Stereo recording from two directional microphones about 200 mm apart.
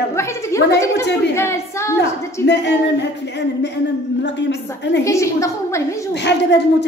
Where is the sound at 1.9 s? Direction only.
60° left (ahead or behind).